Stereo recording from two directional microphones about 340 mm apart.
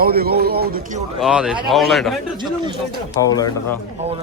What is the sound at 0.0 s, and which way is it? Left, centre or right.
A man's voice, right.